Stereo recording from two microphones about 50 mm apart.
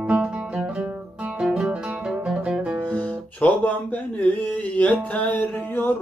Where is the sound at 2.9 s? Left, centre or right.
Left.